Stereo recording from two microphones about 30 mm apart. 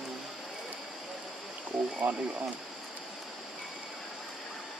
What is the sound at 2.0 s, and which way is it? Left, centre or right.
Speech, right.